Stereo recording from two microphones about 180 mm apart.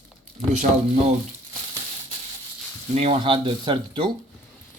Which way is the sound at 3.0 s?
30° right (ahead or behind).